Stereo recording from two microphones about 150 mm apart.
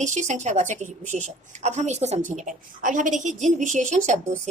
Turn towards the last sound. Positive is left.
turn(degrees=-50)  # may be behind; listen again after turning